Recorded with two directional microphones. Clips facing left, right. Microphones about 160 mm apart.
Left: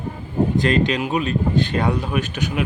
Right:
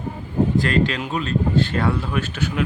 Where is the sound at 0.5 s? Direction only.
20° left (ahead or behind).